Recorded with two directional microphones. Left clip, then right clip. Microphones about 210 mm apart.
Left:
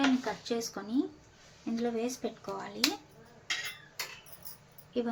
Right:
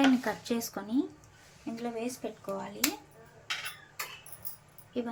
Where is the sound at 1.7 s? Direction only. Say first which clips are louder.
Left 3 dB; 5° left (ahead or behind).